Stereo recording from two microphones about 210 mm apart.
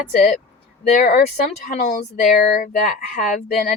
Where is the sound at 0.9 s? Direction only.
40° left (ahead or behind).